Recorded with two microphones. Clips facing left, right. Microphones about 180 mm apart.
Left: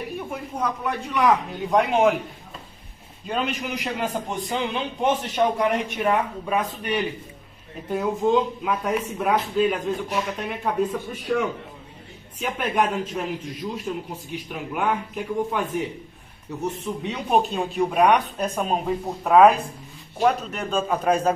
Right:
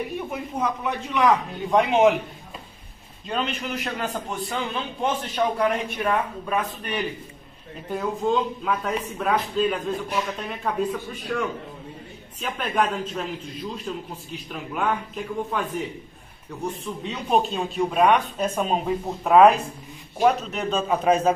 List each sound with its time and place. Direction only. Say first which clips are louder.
0.3 s speech: left 1 dB; centre (ahead or behind)
3.3 s speech: left 1 dB; 10° left (ahead or behind)
16.8 s speech: left 2 dB; 15° left (ahead or behind)
17.4 s speech: left 3 dB; 5° left (ahead or behind)
20.7 s a man's voice: right 1 dB; 5° right (ahead or behind)